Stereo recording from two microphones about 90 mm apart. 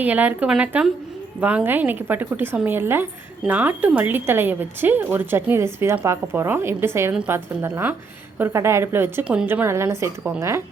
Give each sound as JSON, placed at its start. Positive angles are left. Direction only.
{"t": 0.0, "sound": "speech", "side_deg": -15}
{"t": 9.2, "sound": "speech", "side_deg": -10}
{"t": 9.5, "sound": "a woman's voice", "side_deg": -25}